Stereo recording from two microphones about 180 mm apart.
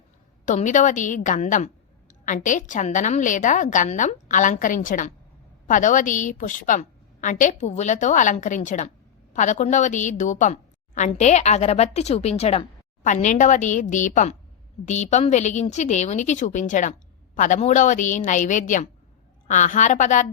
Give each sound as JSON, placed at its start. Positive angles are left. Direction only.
{"t": 0.4, "sound": "a woman's voice", "side_deg": 45}